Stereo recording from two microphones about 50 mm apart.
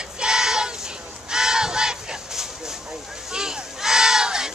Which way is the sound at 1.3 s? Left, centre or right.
Centre.